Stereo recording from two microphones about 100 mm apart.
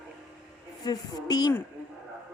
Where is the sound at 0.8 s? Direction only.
40° left (ahead or behind).